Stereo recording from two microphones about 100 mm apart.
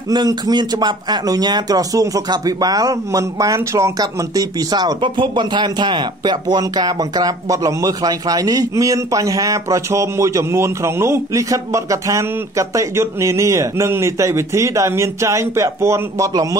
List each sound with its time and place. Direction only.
0.1 s speech: 45° right (ahead or behind); by 16.3 s 30° right (ahead or behind)